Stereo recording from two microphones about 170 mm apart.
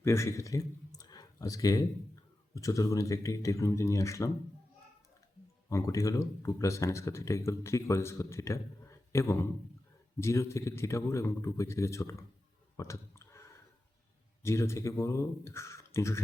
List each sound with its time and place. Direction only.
0.0 s speech: 15° left (ahead or behind)
0.9 s a sound: 20° left (ahead or behind)
2.6 s speech: 20° left (ahead or behind)
5.6 s speech: 15° left (ahead or behind)
12.7 s a sound: 15° left (ahead or behind)
14.4 s speech: 15° left (ahead or behind)